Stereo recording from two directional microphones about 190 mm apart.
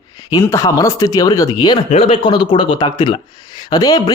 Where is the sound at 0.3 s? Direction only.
15° left (ahead or behind).